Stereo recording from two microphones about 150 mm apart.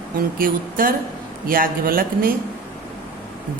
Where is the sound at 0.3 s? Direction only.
70° right (ahead or behind).